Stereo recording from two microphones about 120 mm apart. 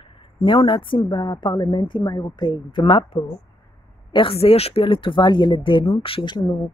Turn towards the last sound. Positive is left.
turn(degrees=40)  # may be behind; listen again after turning